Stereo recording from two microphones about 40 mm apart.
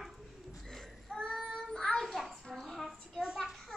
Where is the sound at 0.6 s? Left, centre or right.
Centre.